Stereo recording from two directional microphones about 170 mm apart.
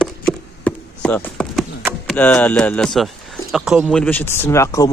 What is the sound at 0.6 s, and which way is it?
Chop, 5° left (ahead or behind).